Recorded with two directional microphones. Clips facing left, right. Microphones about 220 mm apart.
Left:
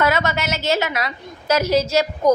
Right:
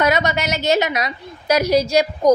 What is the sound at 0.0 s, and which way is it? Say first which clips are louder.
A woman's voice: right 2 dB; 15° right (ahead or behind).